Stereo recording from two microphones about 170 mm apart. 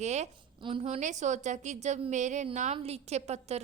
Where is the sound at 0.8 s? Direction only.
45° right (ahead or behind).